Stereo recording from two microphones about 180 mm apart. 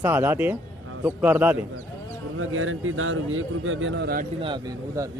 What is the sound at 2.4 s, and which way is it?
Speech, 90° right.